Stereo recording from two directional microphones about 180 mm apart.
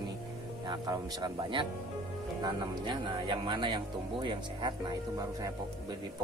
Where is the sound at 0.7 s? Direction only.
25° right (ahead or behind).